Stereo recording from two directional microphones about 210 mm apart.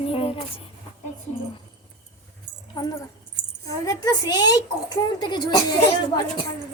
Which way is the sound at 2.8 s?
20° left (ahead or behind).